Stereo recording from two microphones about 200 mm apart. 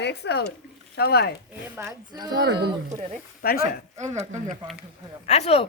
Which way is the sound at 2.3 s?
60° right (ahead or behind).